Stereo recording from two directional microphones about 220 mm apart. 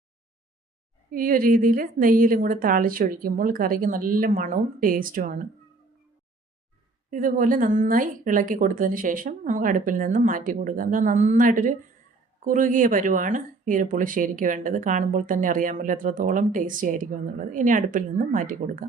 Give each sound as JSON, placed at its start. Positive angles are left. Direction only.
{"t": 1.1, "sound": "speech", "side_deg": -40}
{"t": 7.1, "sound": "speech", "side_deg": -40}